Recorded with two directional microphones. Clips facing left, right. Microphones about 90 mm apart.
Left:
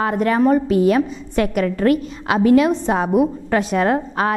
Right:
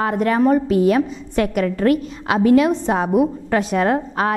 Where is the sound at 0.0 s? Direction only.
15° left (ahead or behind).